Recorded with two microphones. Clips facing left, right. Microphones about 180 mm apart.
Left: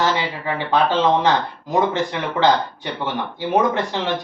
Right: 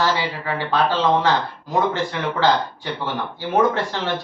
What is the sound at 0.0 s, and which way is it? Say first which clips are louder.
Speech: left 1 dB; 20° left (ahead or behind).